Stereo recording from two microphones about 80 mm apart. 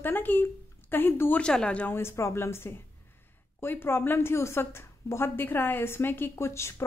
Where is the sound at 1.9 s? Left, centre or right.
Left.